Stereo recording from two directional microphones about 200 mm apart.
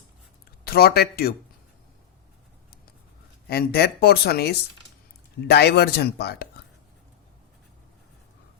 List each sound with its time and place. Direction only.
0.6 s speech: 50° left (ahead or behind)
3.4 s speech: 50° left (ahead or behind)